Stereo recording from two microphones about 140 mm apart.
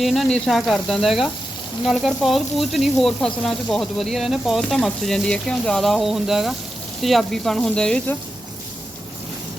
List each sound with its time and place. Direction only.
0.0 s sizzle: centre (ahead or behind)